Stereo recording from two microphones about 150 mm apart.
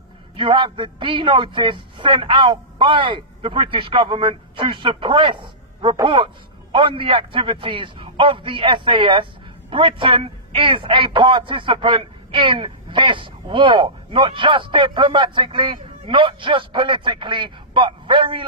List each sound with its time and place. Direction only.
0.4 s a man's voice: 35° right (ahead or behind)